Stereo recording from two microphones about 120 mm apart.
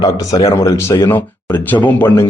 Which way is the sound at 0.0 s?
30° left (ahead or behind).